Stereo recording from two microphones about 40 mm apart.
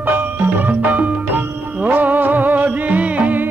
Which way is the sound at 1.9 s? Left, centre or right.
Right.